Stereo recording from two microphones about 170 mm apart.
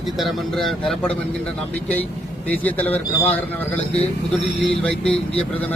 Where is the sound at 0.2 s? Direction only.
Centre (ahead or behind).